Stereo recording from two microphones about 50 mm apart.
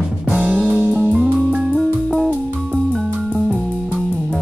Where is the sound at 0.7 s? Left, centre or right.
Right.